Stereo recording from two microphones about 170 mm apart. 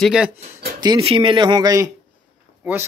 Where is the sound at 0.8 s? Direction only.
30° right (ahead or behind).